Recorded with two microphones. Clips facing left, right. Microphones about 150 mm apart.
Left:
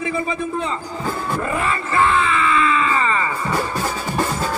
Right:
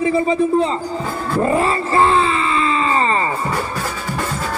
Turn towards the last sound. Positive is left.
turn(degrees=-35)  # may be behind; listen again after turning